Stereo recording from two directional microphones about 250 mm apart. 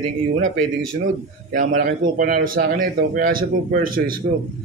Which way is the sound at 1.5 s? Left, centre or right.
Right.